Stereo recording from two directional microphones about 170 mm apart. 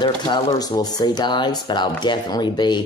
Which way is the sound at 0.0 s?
25° left (ahead or behind).